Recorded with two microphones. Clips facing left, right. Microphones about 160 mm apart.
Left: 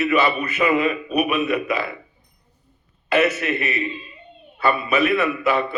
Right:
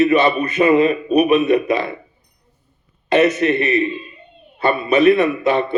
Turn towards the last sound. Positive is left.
turn(degrees=-35)  # may be behind; listen again after turning